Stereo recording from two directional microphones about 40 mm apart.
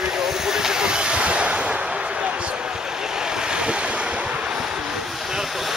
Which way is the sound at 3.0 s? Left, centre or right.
Centre.